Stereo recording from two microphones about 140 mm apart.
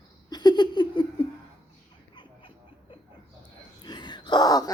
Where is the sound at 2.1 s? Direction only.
35° left (ahead or behind).